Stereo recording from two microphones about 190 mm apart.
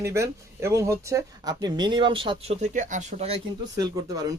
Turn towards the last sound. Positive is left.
turn(degrees=-20)  # may be behind; listen again after turning